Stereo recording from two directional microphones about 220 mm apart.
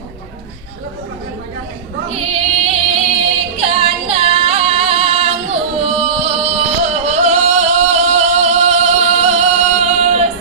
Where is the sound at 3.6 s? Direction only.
25° right (ahead or behind).